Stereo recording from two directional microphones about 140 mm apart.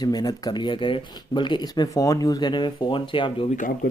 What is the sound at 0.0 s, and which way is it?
Speech, 30° left (ahead or behind).